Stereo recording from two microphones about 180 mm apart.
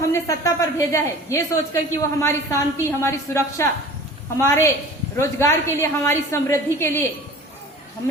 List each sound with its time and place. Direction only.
0.1 s a woman's voice: 15° left (ahead or behind)